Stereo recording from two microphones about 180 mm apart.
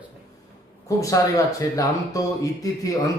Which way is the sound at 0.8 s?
20° left (ahead or behind).